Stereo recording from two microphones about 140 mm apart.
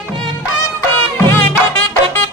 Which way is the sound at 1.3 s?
15° left (ahead or behind).